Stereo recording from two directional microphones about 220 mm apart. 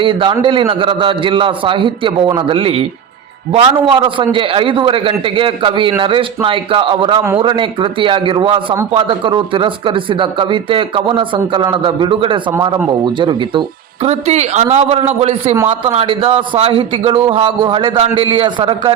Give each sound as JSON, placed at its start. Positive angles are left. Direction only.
{"t": 0.0, "sound": "a man's voice", "side_deg": -25}